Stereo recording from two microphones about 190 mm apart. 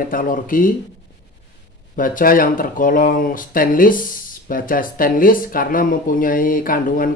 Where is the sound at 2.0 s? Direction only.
45° left (ahead or behind).